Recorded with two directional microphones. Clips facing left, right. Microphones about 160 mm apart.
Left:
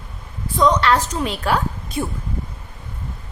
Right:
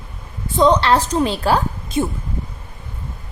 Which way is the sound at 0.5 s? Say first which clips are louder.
Right 2 dB; 30° right (ahead or behind).